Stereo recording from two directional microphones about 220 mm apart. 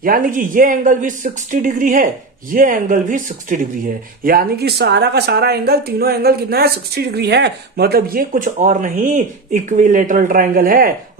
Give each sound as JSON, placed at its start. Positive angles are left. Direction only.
{"t": 0.0, "sound": "speech", "side_deg": -40}